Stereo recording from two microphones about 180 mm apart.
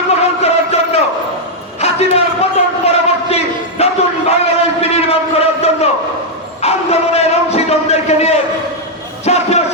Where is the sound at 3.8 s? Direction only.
35° left (ahead or behind).